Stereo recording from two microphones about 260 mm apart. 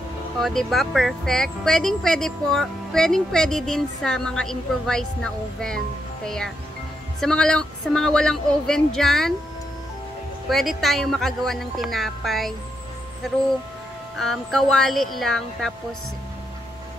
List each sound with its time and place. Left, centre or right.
0.4 s speech: centre
10.5 s speech: centre
14.1 s speech: centre